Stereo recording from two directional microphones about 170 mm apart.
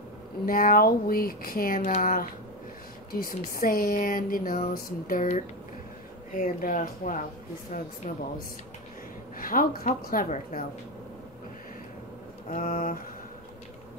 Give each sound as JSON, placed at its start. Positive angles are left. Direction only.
{"t": 0.5, "sound": "speech", "side_deg": 55}
{"t": 1.8, "sound": "speech", "side_deg": 45}
{"t": 9.4, "sound": "speech", "side_deg": 55}
{"t": 12.4, "sound": "speech", "side_deg": 50}